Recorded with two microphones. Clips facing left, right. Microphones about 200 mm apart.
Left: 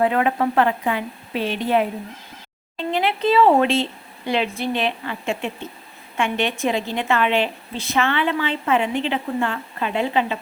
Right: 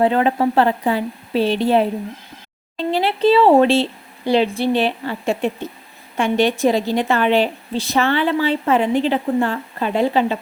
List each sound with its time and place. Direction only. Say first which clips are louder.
0.0 s a woman's voice: right 3 dB; 30° right (ahead or behind)
2.9 s a woman's voice: right 4 dB; 35° right (ahead or behind)